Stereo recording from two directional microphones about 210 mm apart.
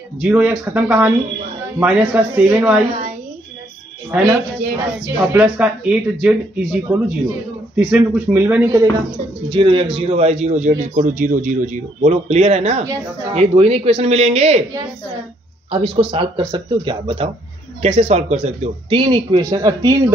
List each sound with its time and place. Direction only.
0.2 s speech: 5° right (ahead or behind)
4.1 s speech: 10° right (ahead or behind)
9.5 s a man's voice: 25° right (ahead or behind)
15.7 s speech: 25° right (ahead or behind)